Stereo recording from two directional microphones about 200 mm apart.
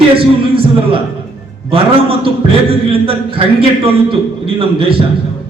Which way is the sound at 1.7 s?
30° right (ahead or behind).